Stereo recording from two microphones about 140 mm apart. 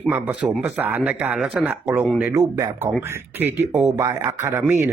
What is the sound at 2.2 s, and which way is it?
Speech, 20° right (ahead or behind).